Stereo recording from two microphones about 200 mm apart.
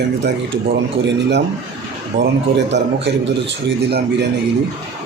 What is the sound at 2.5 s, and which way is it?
Speech, 60° right (ahead or behind).